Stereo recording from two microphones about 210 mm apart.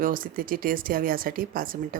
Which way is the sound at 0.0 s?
40° right (ahead or behind).